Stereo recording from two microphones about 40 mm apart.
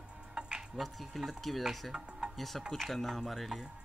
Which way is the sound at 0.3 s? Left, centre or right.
Right.